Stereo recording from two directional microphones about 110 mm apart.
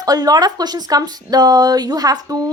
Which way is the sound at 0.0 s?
35° right (ahead or behind).